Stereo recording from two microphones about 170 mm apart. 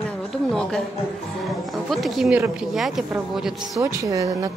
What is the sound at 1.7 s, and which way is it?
Speech, centre (ahead or behind).